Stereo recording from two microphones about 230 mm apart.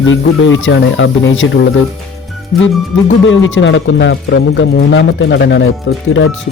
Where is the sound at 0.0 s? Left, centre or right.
Left.